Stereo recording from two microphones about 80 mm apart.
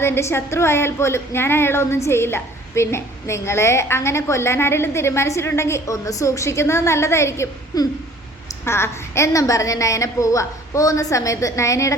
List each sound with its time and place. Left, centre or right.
0.0 s a woman's voice: left
7.7 s a woman's voice: left
8.6 s a woman's voice: left